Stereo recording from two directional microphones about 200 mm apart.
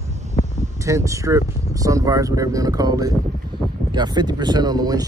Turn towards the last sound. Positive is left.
turn(degrees=-20)  # may be behind; listen again after turning